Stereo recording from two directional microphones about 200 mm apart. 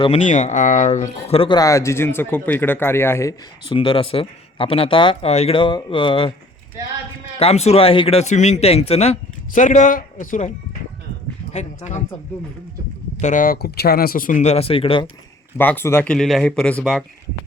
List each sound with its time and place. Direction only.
0.0 s speech: 35° left (ahead or behind)
1.4 s speech: 20° left (ahead or behind)
3.7 s speech: 25° left (ahead or behind)
7.3 s speech: 30° left (ahead or behind)
11.5 s speech: 35° left (ahead or behind)
13.2 s speech: 40° left (ahead or behind)
15.5 s speech: 10° left (ahead or behind)